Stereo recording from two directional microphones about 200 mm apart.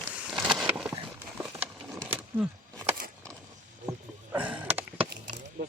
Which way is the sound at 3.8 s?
10° right (ahead or behind).